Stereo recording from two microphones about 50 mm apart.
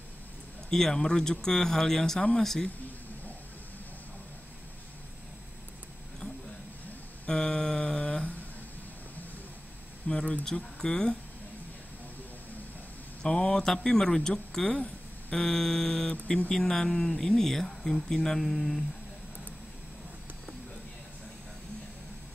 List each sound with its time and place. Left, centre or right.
0.7 s speech: centre
7.2 s mantra: centre
10.0 s speech: centre
13.2 s speech: centre
14.8 s a sound: left
15.4 s speech: centre